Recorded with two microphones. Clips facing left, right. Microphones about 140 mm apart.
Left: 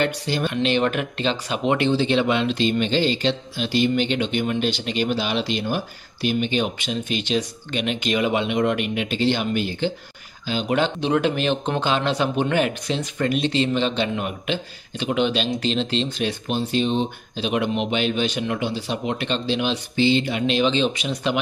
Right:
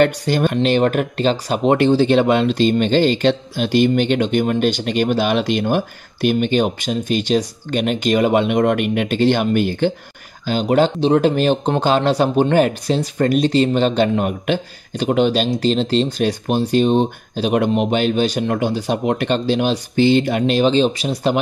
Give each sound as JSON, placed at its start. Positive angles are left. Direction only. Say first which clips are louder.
{"t": 0.0, "sound": "speech", "louder": "right 7 dB", "side_deg": -50}